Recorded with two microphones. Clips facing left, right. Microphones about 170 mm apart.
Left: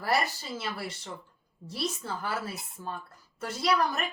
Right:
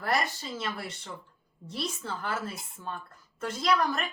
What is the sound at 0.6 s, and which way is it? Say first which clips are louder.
A woman's voice: even; 5° left (ahead or behind).